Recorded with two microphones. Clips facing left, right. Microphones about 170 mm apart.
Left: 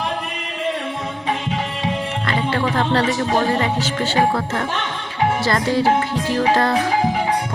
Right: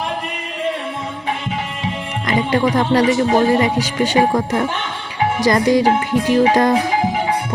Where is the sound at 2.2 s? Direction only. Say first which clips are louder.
Right 6 dB; 15° right (ahead or behind).